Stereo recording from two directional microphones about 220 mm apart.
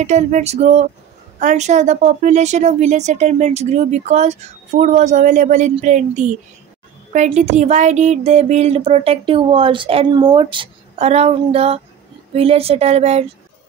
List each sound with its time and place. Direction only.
0.0 s a woman's voice: 30° right (ahead or behind)